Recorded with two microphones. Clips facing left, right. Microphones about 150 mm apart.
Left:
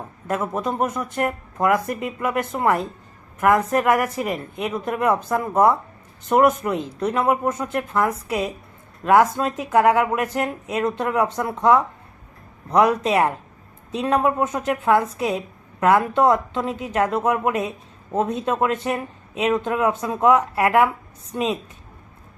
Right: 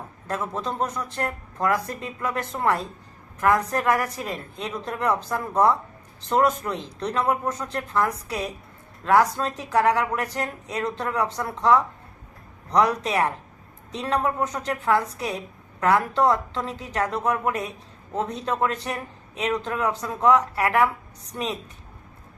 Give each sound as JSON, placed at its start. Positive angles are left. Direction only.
{"t": 0.3, "sound": "a woman's voice", "side_deg": 20}
{"t": 9.3, "sound": "a woman's voice", "side_deg": 20}